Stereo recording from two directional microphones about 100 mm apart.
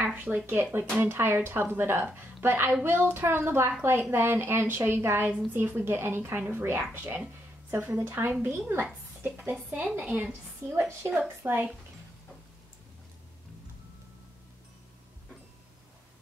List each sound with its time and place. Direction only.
0.1 s a woman's voice: 15° right (ahead or behind)
10.7 s a woman's voice: 25° right (ahead or behind)